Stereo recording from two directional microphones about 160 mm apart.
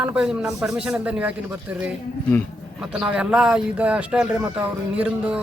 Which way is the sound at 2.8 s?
5° right (ahead or behind).